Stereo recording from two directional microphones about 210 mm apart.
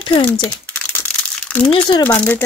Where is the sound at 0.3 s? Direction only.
5° left (ahead or behind).